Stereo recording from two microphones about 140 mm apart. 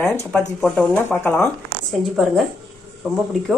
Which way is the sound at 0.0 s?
20° left (ahead or behind).